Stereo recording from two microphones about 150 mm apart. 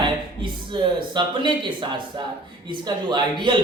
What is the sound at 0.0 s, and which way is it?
Speech, 30° right (ahead or behind).